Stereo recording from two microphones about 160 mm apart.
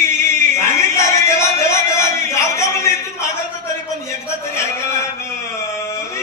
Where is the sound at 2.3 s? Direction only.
20° left (ahead or behind).